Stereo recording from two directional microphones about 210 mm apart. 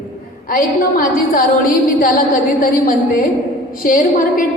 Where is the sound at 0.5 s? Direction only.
40° left (ahead or behind).